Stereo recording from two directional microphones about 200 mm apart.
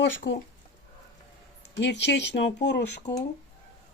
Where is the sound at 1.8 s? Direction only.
60° left (ahead or behind).